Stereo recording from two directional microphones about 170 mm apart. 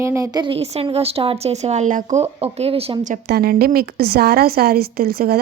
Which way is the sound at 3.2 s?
65° right (ahead or behind).